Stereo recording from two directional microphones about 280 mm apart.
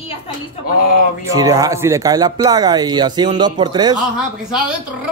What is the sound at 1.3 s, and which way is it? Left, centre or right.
Speech, centre.